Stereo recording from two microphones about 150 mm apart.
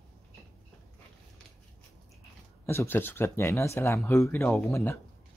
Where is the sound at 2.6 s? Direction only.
15° left (ahead or behind).